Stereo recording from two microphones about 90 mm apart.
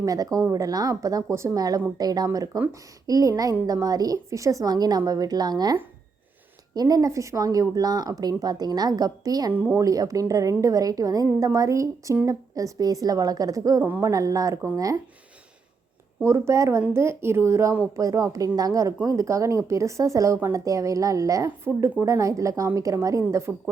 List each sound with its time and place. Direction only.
0.0 s a woman's voice: 45° right (ahead or behind)
9.5 s speech: 25° right (ahead or behind)
9.8 s a woman's voice: 40° right (ahead or behind)
16.2 s a woman's voice: 30° right (ahead or behind)